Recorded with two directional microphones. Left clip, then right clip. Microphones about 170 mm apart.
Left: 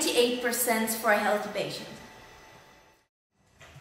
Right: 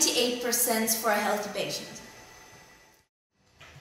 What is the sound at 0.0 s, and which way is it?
Speech, 10° left (ahead or behind).